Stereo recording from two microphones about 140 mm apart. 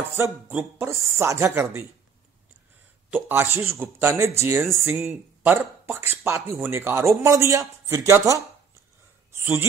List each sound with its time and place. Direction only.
0.2 s speech: 15° right (ahead or behind)
3.1 s a man's voice: 15° right (ahead or behind)
4.9 s a man's voice: 5° right (ahead or behind); by 8.4 s 20° right (ahead or behind)
9.3 s a sound: 20° right (ahead or behind)